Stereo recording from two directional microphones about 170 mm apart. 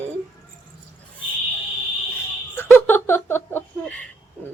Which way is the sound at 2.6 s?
15° left (ahead or behind).